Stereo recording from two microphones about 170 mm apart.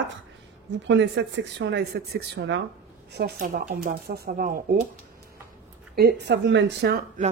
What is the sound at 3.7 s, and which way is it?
Speech, 60° right (ahead or behind).